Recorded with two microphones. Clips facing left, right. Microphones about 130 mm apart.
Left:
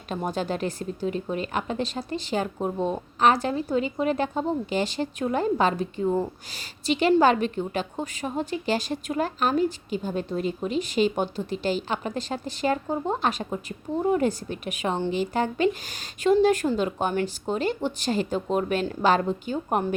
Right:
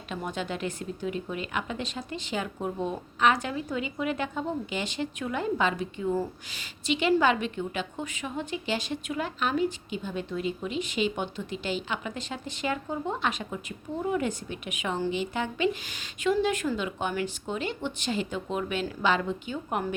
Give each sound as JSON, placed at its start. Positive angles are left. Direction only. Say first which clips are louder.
{"t": 0.1, "sound": "a woman's voice", "louder": "left 5 dB", "side_deg": 40}